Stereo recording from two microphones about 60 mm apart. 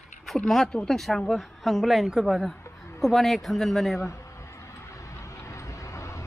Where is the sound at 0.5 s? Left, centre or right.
Centre.